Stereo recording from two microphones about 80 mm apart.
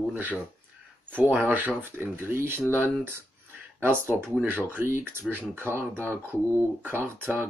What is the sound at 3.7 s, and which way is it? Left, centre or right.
Speech, right.